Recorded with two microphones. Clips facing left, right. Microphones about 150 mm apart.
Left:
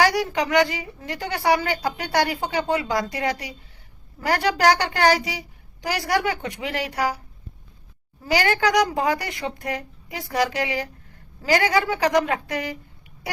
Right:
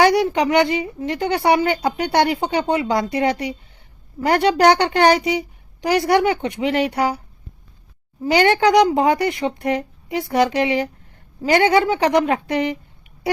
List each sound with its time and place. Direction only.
0.0 s a woman's voice: 25° right (ahead or behind)
8.2 s a woman's voice: 25° right (ahead or behind)